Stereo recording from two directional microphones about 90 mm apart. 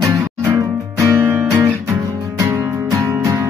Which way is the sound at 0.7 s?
35° right (ahead or behind).